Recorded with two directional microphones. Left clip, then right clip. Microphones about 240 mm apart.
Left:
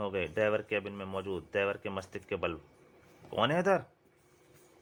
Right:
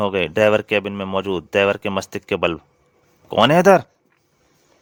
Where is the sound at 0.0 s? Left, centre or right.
Right.